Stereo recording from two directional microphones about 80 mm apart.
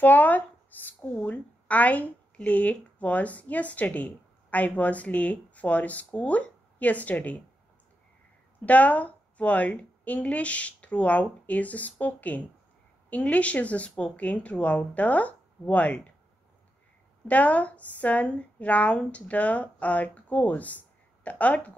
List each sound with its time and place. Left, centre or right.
0.0 s a sound: left
1.2 s speech: centre
8.5 s a woman's voice: centre
17.3 s a woman's voice: centre